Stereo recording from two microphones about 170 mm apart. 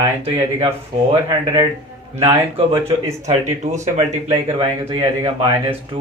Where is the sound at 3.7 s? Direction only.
40° right (ahead or behind).